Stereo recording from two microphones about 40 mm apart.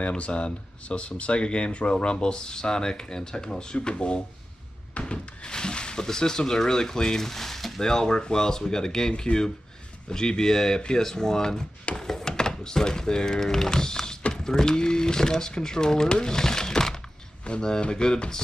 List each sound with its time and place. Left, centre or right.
0.1 s speech: left
4.9 s door: left
6.0 s speech: centre